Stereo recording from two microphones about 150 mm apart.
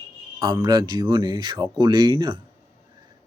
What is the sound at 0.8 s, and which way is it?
Speech, 30° right (ahead or behind).